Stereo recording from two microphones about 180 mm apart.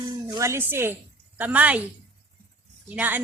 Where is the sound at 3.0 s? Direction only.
10° right (ahead or behind).